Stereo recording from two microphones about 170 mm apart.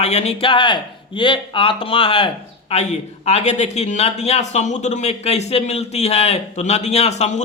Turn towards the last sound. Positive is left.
turn(degrees=40)  # may be behind; listen again after turning